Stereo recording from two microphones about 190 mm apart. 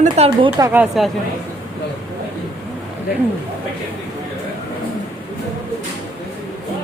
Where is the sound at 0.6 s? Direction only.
10° right (ahead or behind).